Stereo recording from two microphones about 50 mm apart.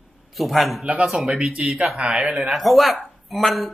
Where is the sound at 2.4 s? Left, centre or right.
Centre.